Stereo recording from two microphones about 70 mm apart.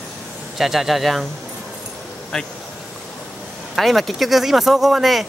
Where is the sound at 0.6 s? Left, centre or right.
Centre.